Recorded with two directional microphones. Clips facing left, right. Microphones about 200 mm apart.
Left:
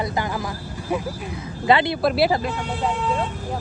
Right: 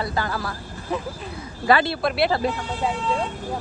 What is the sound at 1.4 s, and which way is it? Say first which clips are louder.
Speech: left 1 dB; 20° left (ahead or behind).